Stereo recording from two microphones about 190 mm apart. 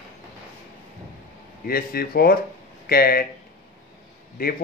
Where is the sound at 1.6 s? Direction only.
50° left (ahead or behind).